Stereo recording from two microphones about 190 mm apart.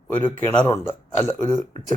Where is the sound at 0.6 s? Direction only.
10° left (ahead or behind).